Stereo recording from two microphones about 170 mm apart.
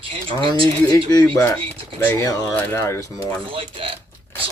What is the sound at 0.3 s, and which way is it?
Music, 30° right (ahead or behind).